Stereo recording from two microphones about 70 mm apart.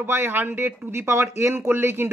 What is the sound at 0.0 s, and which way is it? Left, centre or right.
Speech, right.